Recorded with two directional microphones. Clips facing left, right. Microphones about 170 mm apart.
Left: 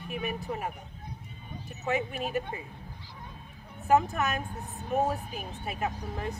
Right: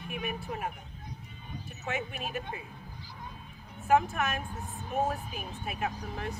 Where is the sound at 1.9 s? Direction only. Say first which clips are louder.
Left 4 dB; 35° left (ahead or behind).